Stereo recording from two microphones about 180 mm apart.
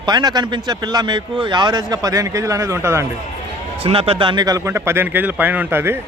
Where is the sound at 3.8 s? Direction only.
35° right (ahead or behind).